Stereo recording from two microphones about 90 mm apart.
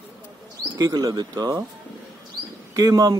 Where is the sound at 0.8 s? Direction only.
45° right (ahead or behind).